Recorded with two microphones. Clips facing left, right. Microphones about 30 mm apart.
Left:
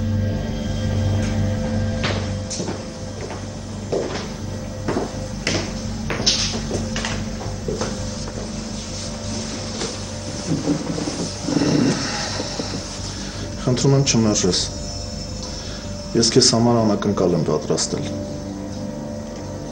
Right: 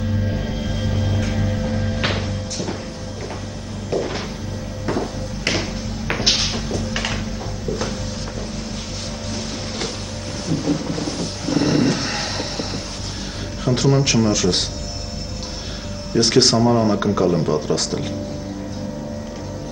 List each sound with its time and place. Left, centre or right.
0.3 s music: centre
3.9 s a sound: centre
4.8 s music: centre
10.5 s vehicle: centre
13.7 s speech: centre
16.1 s speech: centre